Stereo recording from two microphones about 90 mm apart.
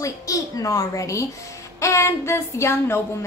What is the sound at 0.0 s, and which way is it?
Speech, 35° left (ahead or behind).